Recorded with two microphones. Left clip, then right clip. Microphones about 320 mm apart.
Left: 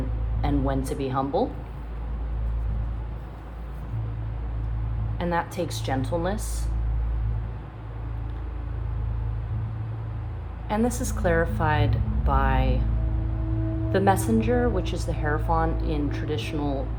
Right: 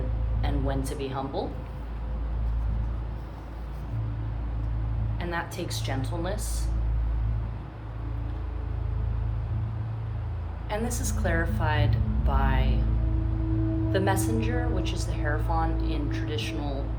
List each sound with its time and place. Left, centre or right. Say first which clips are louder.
0.4 s speech: left 5 dB; centre
5.1 s a woman's voice: left 6 dB; centre
10.7 s a woman's voice: left 5 dB; centre
13.9 s a woman's voice: left 6 dB; left